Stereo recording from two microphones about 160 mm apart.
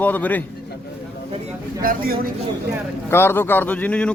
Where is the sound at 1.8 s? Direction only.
65° right (ahead or behind).